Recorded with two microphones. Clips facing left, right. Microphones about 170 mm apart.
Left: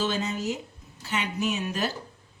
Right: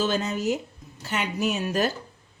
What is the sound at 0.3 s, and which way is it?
A woman's voice, 55° right (ahead or behind).